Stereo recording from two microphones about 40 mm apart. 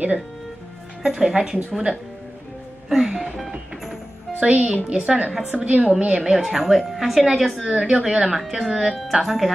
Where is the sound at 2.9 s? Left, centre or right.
Centre.